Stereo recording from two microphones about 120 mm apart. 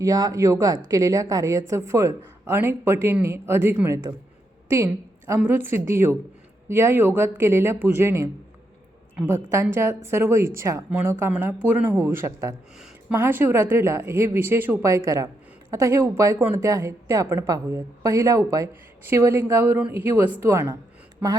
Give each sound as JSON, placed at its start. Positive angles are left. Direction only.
{"t": 0.0, "sound": "a woman's voice", "side_deg": -30}